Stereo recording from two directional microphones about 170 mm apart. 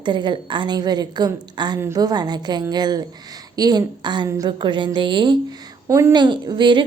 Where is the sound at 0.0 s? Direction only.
25° right (ahead or behind).